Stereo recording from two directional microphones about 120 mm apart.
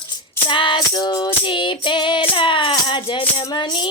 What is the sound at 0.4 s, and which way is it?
Music, 40° left (ahead or behind).